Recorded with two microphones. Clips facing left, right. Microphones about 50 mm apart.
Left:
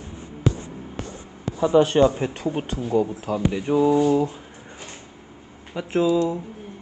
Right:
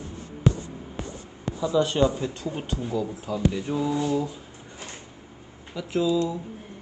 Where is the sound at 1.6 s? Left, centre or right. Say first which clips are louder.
Left 6 dB; left.